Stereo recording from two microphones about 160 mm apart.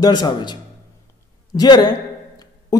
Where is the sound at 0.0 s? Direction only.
25° left (ahead or behind).